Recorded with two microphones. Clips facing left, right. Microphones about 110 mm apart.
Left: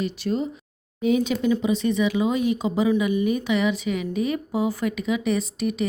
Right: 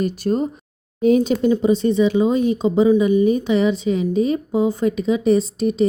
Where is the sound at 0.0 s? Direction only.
45° right (ahead or behind).